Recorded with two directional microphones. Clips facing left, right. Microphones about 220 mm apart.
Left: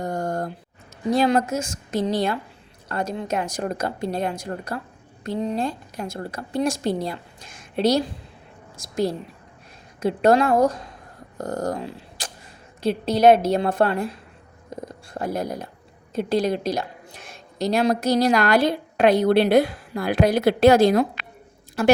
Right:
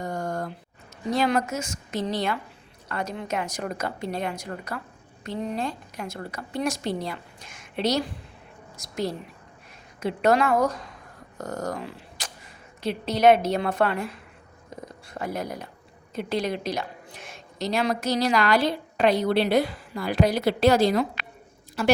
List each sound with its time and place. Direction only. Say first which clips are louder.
0.0 s a sound: left 4 dB; 40° left (ahead or behind)
1.1 s a woman's voice: left 4 dB; 30° left (ahead or behind)
15.1 s a woman's voice: left 4 dB; 40° left (ahead or behind)